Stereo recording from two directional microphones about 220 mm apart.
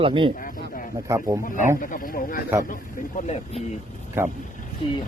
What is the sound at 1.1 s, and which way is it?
Speech, 15° right (ahead or behind).